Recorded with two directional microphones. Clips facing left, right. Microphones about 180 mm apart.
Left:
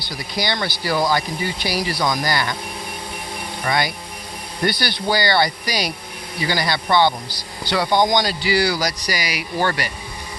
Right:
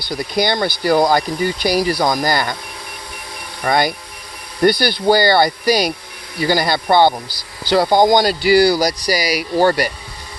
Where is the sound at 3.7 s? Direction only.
45° right (ahead or behind).